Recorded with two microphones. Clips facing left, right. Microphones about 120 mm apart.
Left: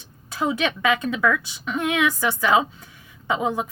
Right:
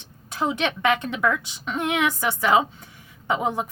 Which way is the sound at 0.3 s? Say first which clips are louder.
Left 1 dB; 25° right (ahead or behind).